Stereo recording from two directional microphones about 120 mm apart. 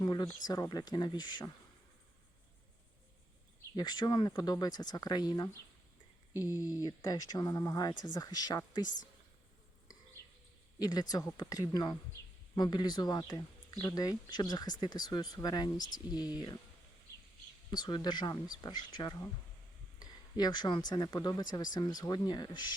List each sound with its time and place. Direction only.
0.0 s a sound: 35° left (ahead or behind)
0.4 s speech: 30° left (ahead or behind)
3.8 s speech: 35° left (ahead or behind)
6.8 s speech: 30° left (ahead or behind)
10.8 s a man's voice: 30° left (ahead or behind)
17.7 s speech: 35° left (ahead or behind)